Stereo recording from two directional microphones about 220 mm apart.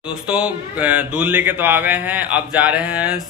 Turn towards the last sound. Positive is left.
turn(degrees=-5)  # may be behind; listen again after turning